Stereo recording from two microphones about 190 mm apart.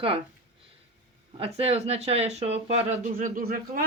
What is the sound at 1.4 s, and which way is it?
Speech, 30° right (ahead or behind).